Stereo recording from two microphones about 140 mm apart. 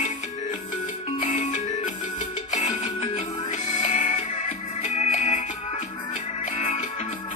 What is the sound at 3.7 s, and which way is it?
Music, 60° left (ahead or behind).